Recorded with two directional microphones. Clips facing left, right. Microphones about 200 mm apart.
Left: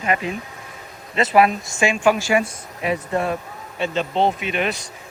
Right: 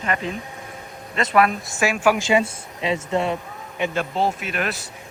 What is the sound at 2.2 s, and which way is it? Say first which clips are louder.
Speech: even; 20° right (ahead or behind).